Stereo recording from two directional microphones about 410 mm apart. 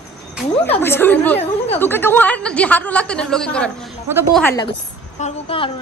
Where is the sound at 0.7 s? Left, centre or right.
Centre.